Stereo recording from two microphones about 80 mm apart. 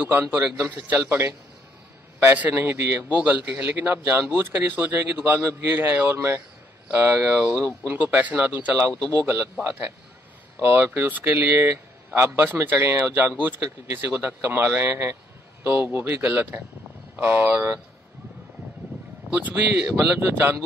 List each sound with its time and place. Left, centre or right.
0.1 s speech: right
2.5 s speech: right
3.0 s speech: right
8.8 s speech: right
19.3 s speech: centre
20.0 s speech: right